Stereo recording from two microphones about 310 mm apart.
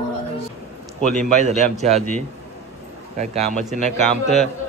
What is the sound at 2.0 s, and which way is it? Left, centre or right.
Speech, centre.